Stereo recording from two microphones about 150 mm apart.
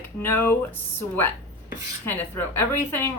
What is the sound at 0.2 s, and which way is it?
Speech, 15° left (ahead or behind).